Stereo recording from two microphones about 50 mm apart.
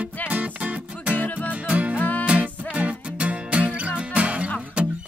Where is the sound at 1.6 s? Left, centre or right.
Right.